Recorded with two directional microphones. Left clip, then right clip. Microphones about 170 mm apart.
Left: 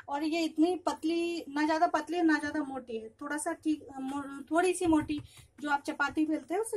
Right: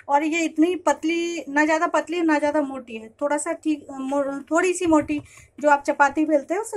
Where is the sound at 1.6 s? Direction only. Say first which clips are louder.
Right 7 dB; 20° right (ahead or behind).